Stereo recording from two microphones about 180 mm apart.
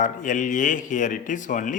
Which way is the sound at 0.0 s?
45° left (ahead or behind).